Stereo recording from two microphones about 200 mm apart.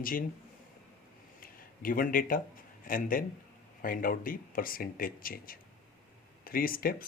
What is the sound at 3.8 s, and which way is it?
Speech, 45° left (ahead or behind).